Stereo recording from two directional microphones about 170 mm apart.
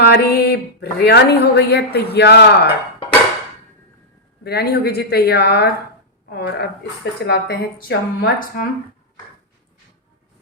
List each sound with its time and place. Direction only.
0.0 s speech: 70° left (ahead or behind)
4.4 s speech: 70° left (ahead or behind)